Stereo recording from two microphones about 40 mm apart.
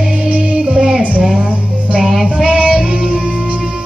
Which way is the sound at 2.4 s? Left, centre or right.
Right.